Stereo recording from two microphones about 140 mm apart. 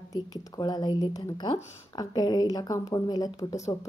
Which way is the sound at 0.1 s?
30° left (ahead or behind).